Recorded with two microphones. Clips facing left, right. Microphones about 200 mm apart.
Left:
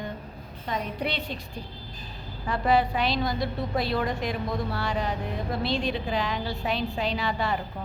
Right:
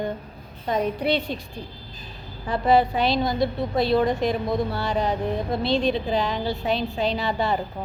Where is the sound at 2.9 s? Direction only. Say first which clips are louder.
Right 4 dB; centre (ahead or behind).